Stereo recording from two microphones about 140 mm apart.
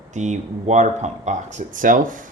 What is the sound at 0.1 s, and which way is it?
Speech, 55° right (ahead or behind).